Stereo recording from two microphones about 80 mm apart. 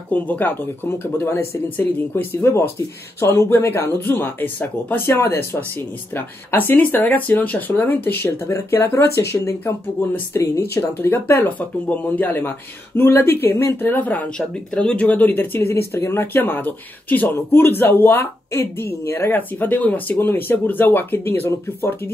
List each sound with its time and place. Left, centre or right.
0.1 s speech: left
13.8 s speech: left